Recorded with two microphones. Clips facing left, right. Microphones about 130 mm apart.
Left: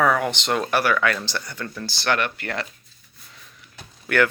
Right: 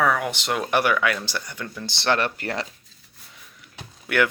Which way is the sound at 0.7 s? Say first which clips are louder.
Right 1 dB; 15° right (ahead or behind).